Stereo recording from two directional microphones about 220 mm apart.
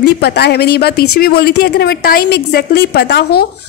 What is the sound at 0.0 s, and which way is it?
Speech, 45° left (ahead or behind).